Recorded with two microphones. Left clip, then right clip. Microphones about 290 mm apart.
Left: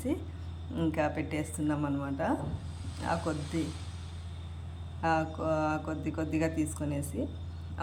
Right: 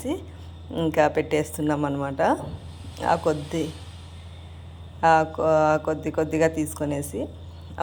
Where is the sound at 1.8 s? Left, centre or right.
Right.